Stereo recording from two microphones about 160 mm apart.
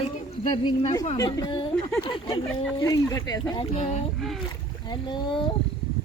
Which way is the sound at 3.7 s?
50° left (ahead or behind).